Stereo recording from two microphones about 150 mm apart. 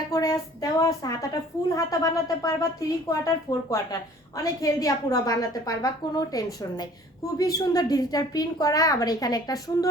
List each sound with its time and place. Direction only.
0.1 s a woman's voice: 25° left (ahead or behind)